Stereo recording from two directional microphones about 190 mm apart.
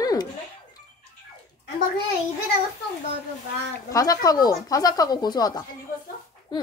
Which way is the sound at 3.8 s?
20° left (ahead or behind).